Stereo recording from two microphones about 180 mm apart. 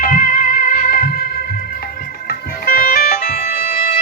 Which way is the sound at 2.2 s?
55° left (ahead or behind).